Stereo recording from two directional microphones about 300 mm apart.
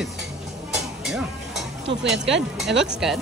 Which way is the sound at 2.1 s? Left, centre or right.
Right.